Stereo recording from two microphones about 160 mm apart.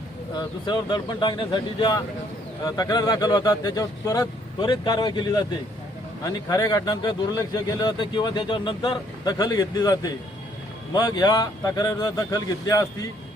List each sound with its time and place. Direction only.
0.3 s speech: 25° left (ahead or behind)